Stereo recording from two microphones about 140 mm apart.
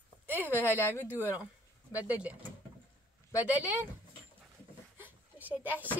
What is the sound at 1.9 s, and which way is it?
Speech, 10° right (ahead or behind).